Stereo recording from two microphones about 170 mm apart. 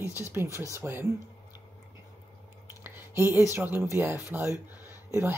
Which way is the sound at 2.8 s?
10° right (ahead or behind).